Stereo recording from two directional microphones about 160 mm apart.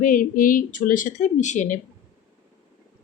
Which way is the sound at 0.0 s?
60° left (ahead or behind).